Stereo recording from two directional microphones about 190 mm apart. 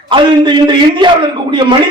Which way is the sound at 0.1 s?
25° right (ahead or behind).